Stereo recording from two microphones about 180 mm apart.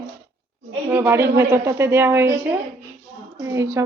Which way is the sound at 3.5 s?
15° right (ahead or behind).